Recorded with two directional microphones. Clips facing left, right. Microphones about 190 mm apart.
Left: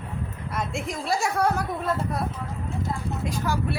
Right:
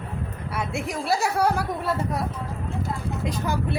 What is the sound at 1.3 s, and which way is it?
Speech, 10° right (ahead or behind).